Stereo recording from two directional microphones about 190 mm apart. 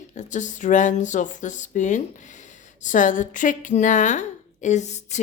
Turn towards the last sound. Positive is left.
turn(degrees=35)  # may be behind; listen again after turning